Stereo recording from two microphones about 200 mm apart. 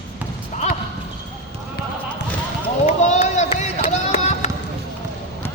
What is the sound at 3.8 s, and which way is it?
Run, 35° left (ahead or behind).